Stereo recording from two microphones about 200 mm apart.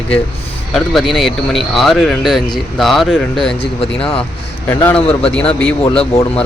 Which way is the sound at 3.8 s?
30° left (ahead or behind).